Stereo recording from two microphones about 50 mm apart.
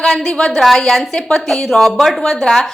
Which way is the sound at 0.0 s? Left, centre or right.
Centre.